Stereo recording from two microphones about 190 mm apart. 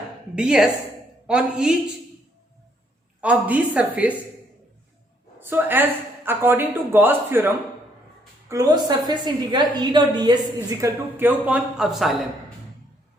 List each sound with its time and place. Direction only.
0.3 s a woman's voice: 5° right (ahead or behind)
3.2 s speech: 5° right (ahead or behind)
5.4 s a woman's voice: 10° right (ahead or behind)